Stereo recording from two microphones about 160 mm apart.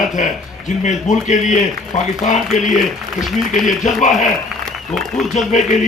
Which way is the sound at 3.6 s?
50° left (ahead or behind).